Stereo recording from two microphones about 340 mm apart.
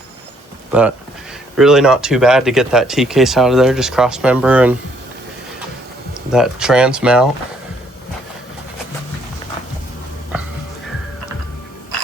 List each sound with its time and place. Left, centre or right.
0.7 s speech: centre
6.1 s speech: centre